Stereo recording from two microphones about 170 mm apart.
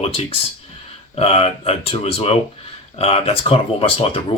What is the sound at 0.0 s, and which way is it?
Speech, 35° left (ahead or behind).